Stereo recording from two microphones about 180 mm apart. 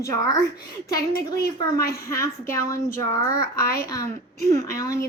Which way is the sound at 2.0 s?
15° left (ahead or behind).